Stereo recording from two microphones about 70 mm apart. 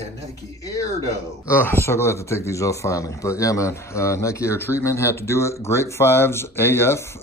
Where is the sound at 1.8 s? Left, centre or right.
Left.